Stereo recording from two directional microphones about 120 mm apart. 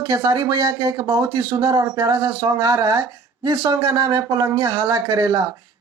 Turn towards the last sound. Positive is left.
turn(degrees=-35)  # may be behind; listen again after turning